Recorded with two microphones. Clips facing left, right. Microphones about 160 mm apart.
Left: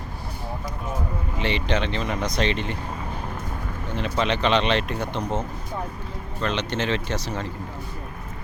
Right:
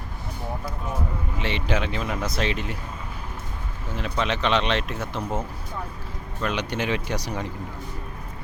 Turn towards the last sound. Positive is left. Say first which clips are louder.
# left 1 dB
turn(degrees=-15)  # may be behind; listen again after turning